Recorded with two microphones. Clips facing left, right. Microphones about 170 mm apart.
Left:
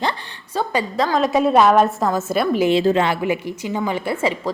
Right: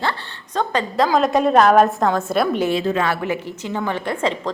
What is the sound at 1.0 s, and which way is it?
A woman's voice, centre (ahead or behind).